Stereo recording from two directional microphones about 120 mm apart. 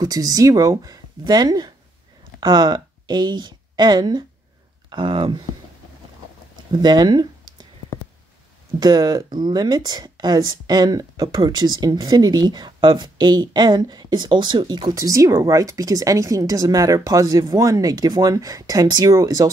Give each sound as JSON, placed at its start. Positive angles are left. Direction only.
{"t": 0.0, "sound": "speech", "side_deg": -30}
{"t": 6.7, "sound": "speech", "side_deg": -35}
{"t": 8.7, "sound": "speech", "side_deg": -35}